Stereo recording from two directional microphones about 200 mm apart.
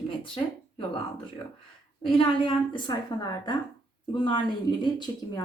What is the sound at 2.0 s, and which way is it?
Speech, 25° left (ahead or behind).